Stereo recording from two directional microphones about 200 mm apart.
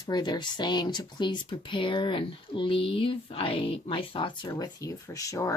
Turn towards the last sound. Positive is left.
turn(degrees=15)  # may be behind; listen again after turning